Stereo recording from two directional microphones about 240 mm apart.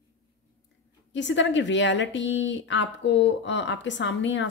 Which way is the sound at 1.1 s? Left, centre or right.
Left.